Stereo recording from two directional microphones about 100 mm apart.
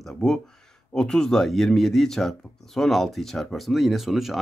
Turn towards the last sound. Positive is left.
turn(degrees=0)  # may be behind; listen again after turning